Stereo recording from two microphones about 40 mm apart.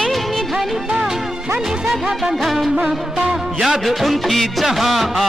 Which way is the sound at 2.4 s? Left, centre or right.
Centre.